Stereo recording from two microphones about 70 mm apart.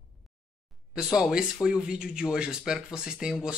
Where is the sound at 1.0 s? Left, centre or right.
Centre.